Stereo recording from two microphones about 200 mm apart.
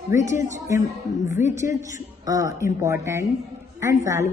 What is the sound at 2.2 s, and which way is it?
A woman's voice, 15° right (ahead or behind).